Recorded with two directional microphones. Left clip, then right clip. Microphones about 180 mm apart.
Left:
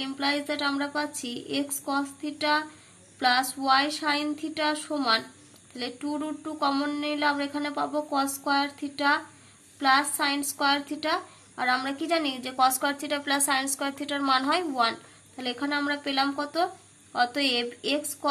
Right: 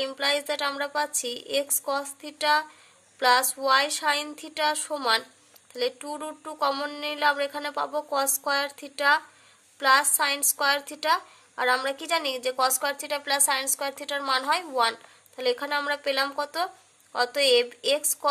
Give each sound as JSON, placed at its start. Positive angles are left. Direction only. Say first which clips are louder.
{"t": 0.0, "sound": "speech", "louder": "right 2 dB", "side_deg": -45}